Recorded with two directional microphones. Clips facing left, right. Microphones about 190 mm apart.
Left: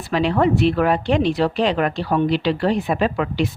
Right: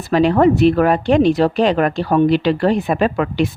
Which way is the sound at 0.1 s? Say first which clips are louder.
Right 5 dB; 45° right (ahead or behind).